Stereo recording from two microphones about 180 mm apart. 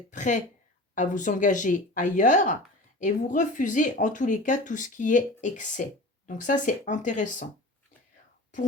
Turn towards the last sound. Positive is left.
turn(degrees=45)  # may be behind; listen again after turning